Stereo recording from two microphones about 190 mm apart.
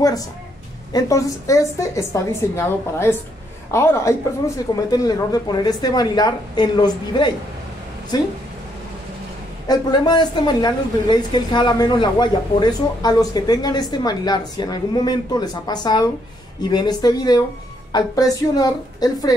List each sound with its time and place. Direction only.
0.9 s a woman's voice: 15° left (ahead or behind)
9.7 s a woman's voice: 20° left (ahead or behind)